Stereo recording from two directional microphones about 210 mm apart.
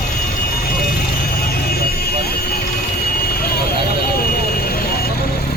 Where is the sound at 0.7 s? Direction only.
45° left (ahead or behind).